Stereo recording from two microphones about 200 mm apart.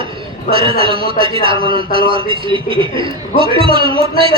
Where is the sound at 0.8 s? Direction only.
25° right (ahead or behind).